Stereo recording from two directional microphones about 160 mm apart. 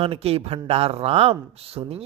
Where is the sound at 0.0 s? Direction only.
40° right (ahead or behind).